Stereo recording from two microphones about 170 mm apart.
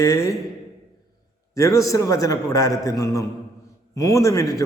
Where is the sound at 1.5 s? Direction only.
20° left (ahead or behind).